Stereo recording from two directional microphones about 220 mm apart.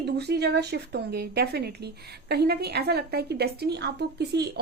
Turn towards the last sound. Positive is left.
turn(degrees=-50)  # may be behind; listen again after turning